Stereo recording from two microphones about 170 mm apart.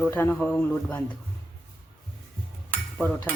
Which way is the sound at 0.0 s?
10° left (ahead or behind).